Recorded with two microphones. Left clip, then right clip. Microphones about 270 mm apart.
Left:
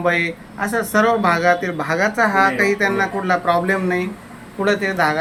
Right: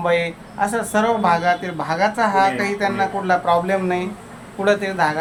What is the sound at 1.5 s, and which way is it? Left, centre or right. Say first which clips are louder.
Speech: left 3 dB; right.